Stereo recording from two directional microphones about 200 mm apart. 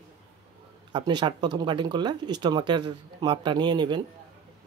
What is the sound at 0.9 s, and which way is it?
Speech, 25° right (ahead or behind).